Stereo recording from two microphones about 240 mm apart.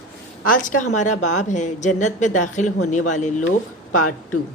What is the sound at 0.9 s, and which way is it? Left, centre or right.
A woman's voice, left.